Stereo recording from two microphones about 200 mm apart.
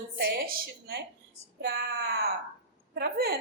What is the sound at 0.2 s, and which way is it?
A woman's voice, 50° right (ahead or behind).